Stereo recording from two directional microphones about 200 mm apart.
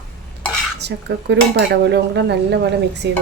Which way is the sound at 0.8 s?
55° right (ahead or behind).